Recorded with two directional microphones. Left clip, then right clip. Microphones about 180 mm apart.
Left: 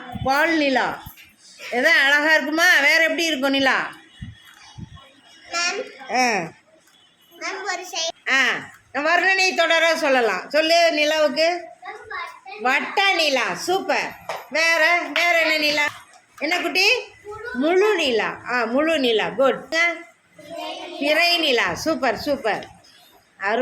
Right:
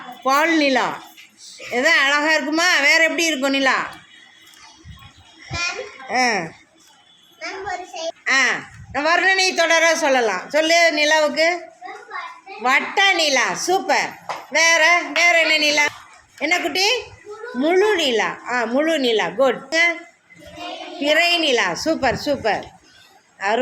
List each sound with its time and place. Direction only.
0.3 s speech: 15° right (ahead or behind)
5.5 s a child's voice: 45° left (ahead or behind)
6.1 s a man's voice: 5° left (ahead or behind)
7.3 s a child's voice: 70° left (ahead or behind)
8.2 s a man's voice: centre (ahead or behind)
12.6 s a man's voice: 5° right (ahead or behind)
21.0 s a man's voice: centre (ahead or behind)